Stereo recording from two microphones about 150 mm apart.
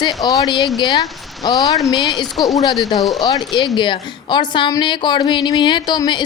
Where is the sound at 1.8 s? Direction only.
Centre (ahead or behind).